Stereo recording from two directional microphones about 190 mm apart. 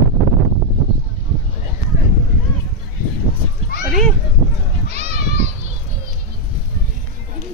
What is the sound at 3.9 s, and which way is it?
Speech, centre (ahead or behind).